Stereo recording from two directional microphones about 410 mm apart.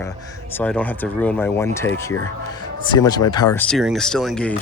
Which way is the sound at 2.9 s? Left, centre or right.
Centre.